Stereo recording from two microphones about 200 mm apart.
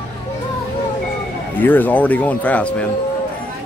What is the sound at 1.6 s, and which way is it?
Speech, 10° left (ahead or behind).